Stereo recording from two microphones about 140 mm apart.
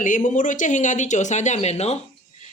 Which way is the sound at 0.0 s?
70° left (ahead or behind).